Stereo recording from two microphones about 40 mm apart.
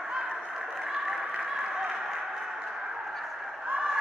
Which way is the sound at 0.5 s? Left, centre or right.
Centre.